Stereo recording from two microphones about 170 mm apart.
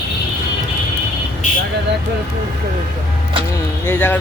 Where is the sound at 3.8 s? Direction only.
10° left (ahead or behind).